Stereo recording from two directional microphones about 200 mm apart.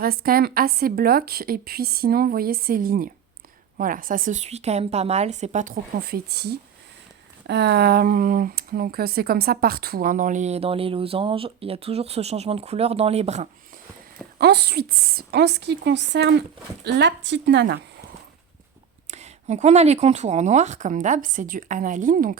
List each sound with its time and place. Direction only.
0.0 s a woman's voice: 50° right (ahead or behind); by 13.5 s 35° right (ahead or behind)
14.3 s a woman's voice: 55° right (ahead or behind)
19.1 s speech: 35° right (ahead or behind)